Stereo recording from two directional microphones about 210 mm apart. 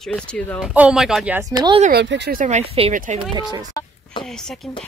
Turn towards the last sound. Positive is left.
turn(degrees=0)  # may be behind; listen again after turning